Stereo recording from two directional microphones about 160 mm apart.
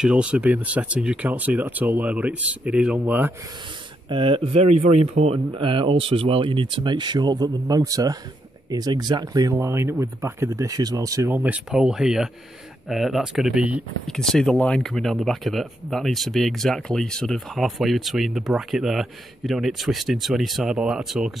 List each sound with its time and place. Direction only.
0.0 s speech: 5° right (ahead or behind)
4.1 s speech: 30° right (ahead or behind)
11.3 s speech: 10° right (ahead or behind)